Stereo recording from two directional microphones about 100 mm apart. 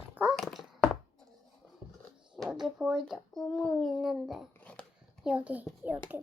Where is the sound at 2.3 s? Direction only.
5° right (ahead or behind).